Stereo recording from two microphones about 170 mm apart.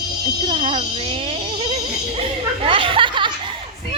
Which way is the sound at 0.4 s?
30° right (ahead or behind).